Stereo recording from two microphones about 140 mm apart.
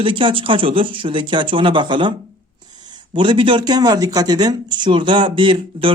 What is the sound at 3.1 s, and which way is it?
Speech, 35° right (ahead or behind).